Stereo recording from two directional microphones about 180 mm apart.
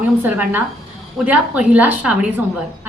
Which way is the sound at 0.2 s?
10° right (ahead or behind).